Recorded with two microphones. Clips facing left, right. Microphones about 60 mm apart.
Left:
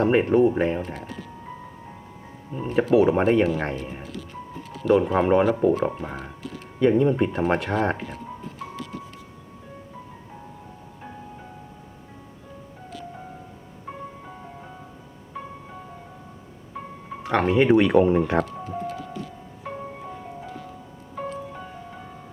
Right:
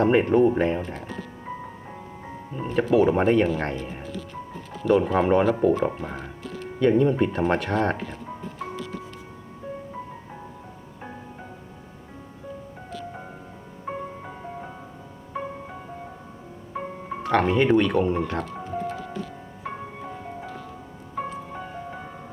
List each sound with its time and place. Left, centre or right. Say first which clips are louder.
0.0 s speech: even; centre
2.5 s speech: left 1 dB; centre
13.9 s music: right 5 dB; right
16.7 s music: right 4 dB; right
17.2 s speech: left 1 dB; centre
19.6 s music: even; centre
21.5 s music: right 3 dB; right